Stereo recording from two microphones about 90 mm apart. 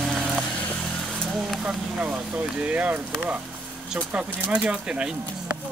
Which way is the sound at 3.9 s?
15° right (ahead or behind).